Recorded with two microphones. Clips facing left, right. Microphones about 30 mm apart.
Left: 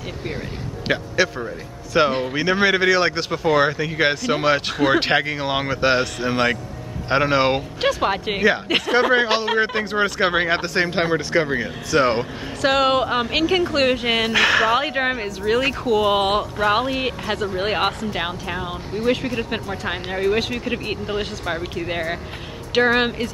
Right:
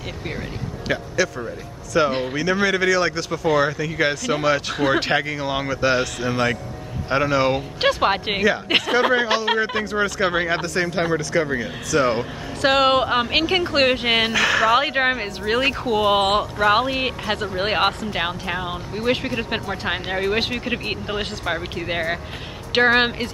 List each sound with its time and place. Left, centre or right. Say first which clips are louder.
0.8 s speech: left 2 dB; left
7.8 s speech: right 2 dB; centre
9.1 s speech: left 1 dB; left
12.6 s speech: right 1 dB; centre
14.3 s speech: left 2 dB; centre
14.8 s speech: right 2 dB; centre